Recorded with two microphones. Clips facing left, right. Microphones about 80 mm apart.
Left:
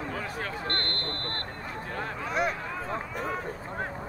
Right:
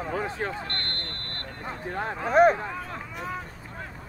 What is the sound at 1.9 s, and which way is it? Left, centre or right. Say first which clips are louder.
Speech: right 8 dB; right.